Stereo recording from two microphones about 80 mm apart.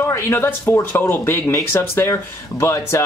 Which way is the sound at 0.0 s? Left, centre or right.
Left.